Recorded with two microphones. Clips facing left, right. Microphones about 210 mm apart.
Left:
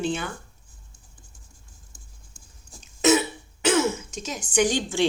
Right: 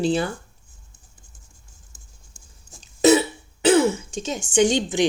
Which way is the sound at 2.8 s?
35° right (ahead or behind).